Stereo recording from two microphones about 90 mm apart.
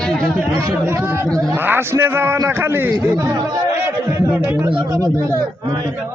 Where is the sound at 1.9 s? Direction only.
25° right (ahead or behind).